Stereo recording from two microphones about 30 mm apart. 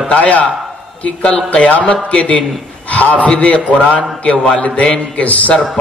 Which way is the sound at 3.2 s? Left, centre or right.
Left.